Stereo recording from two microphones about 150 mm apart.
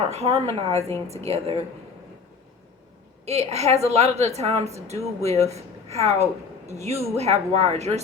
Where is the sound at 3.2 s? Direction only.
45° right (ahead or behind).